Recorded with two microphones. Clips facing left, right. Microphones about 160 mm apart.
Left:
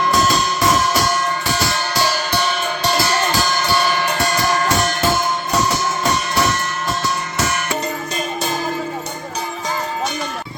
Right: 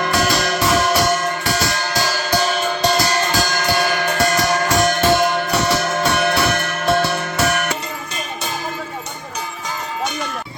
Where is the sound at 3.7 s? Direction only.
50° right (ahead or behind).